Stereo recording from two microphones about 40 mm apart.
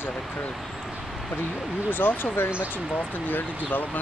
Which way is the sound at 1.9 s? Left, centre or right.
Left.